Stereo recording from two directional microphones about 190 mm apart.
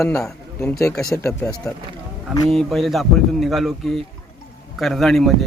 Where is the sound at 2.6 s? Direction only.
Centre (ahead or behind).